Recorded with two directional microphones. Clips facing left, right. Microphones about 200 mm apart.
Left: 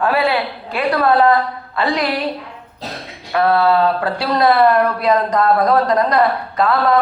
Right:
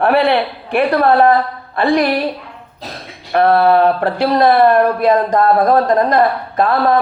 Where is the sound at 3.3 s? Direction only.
55° right (ahead or behind).